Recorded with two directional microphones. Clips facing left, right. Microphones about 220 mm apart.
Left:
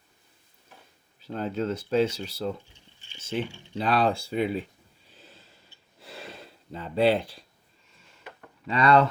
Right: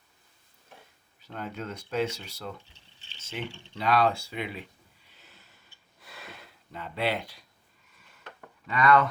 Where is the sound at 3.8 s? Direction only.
30° left (ahead or behind).